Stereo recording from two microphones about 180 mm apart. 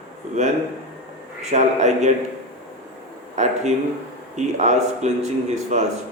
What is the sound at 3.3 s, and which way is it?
Speech, 40° right (ahead or behind).